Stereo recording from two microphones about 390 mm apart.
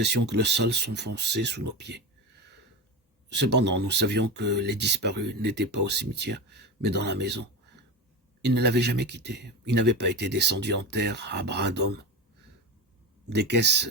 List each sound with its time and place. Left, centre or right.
0.3 s speech: right